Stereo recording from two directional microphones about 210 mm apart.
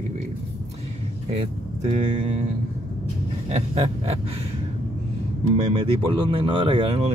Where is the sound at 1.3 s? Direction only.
30° right (ahead or behind).